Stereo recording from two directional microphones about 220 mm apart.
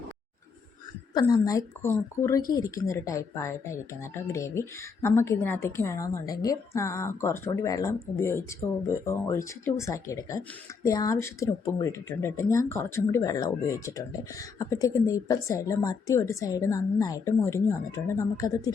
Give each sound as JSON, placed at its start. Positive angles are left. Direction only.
{"t": 1.1, "sound": "speech", "side_deg": 15}